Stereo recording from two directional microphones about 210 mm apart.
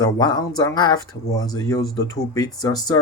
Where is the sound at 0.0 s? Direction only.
20° left (ahead or behind).